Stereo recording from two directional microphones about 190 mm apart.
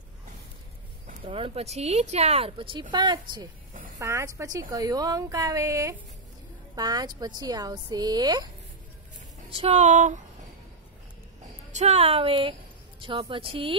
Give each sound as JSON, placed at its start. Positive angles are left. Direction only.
{"t": 1.2, "sound": "a woman's voice", "side_deg": -30}
{"t": 9.5, "sound": "speech", "side_deg": -30}
{"t": 11.7, "sound": "speech", "side_deg": -35}